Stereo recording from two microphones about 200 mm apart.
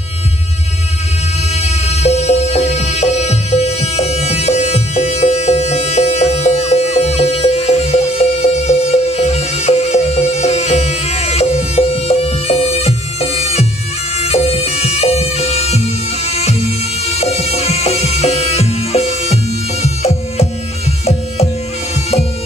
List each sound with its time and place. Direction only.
1.5 s music: 30° left (ahead or behind)